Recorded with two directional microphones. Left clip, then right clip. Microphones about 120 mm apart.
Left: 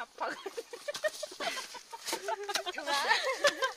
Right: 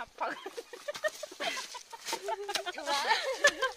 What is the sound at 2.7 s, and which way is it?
Speech, 55° left (ahead or behind).